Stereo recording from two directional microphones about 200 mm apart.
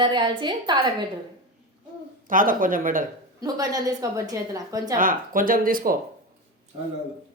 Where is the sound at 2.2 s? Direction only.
45° right (ahead or behind).